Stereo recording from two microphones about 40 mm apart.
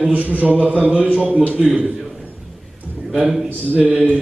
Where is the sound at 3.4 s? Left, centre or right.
Right.